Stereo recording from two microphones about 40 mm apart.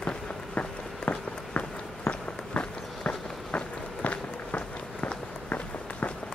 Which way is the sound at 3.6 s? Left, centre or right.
Left.